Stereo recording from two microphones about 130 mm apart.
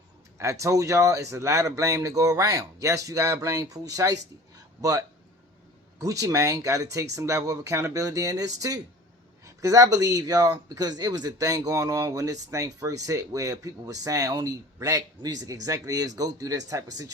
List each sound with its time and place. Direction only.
0.3 s speech: 25° right (ahead or behind)